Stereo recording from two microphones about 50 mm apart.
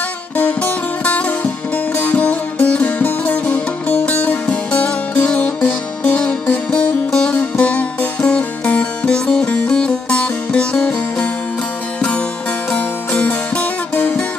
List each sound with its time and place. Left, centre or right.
0.3 s music: left
6.1 s music: left